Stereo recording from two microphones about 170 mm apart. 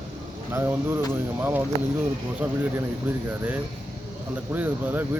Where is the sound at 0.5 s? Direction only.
15° right (ahead or behind).